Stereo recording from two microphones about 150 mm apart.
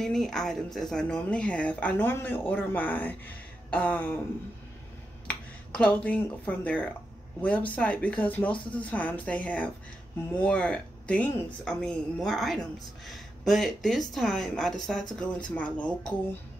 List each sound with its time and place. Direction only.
0.0 s speech: centre (ahead or behind)
5.3 s speech: 10° left (ahead or behind)